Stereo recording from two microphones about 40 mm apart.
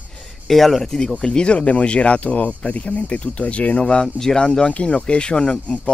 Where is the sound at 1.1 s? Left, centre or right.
Left.